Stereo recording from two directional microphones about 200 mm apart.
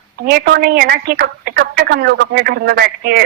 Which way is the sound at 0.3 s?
50° right (ahead or behind).